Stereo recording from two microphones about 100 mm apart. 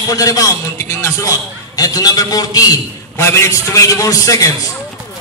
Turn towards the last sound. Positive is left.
turn(degrees=35)  # may be behind; listen again after turning